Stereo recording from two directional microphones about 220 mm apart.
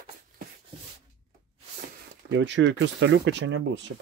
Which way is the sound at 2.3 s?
55° right (ahead or behind).